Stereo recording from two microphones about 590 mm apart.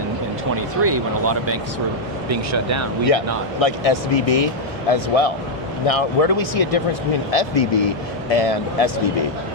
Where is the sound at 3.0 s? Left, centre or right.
Left.